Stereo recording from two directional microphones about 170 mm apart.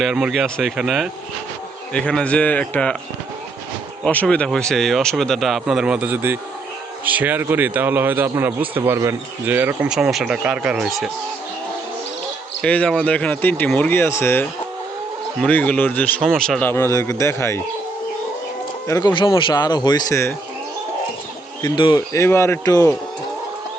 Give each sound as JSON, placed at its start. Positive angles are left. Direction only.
{"t": 0.0, "sound": "speech", "side_deg": 0}
{"t": 4.0, "sound": "speech", "side_deg": 5}
{"t": 12.6, "sound": "speech", "side_deg": 10}
{"t": 18.9, "sound": "speech", "side_deg": 25}
{"t": 21.6, "sound": "speech", "side_deg": 25}